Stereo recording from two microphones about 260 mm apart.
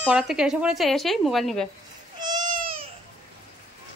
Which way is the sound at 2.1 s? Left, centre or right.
Centre.